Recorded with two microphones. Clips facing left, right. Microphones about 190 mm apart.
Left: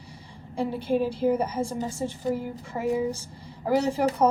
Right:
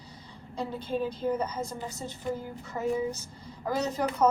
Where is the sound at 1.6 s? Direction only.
30° left (ahead or behind).